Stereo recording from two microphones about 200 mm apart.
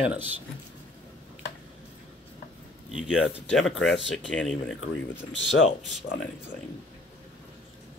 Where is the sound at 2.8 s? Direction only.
Centre (ahead or behind).